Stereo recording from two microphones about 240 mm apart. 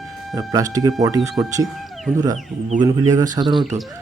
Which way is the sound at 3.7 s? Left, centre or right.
Right.